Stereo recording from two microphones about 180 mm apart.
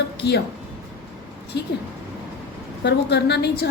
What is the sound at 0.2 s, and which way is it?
Speech, 65° left (ahead or behind).